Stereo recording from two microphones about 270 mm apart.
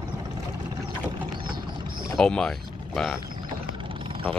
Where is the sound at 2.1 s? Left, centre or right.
Centre.